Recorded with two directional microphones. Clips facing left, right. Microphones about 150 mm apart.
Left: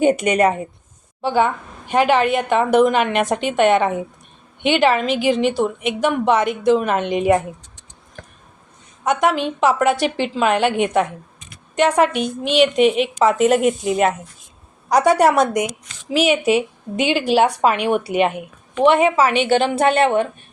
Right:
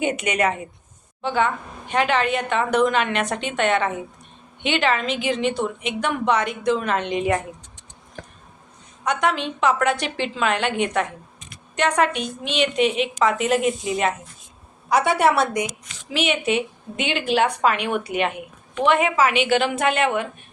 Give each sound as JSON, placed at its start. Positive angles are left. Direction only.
{"t": 0.0, "sound": "a woman's voice", "side_deg": 40}
{"t": 1.2, "sound": "a woman's voice", "side_deg": 5}
{"t": 9.0, "sound": "a woman's voice", "side_deg": 5}
{"t": 13.7, "sound": "a woman's voice", "side_deg": 50}
{"t": 14.8, "sound": "a woman's voice", "side_deg": 40}
{"t": 16.2, "sound": "a woman's voice", "side_deg": 5}
{"t": 18.8, "sound": "a woman's voice", "side_deg": 30}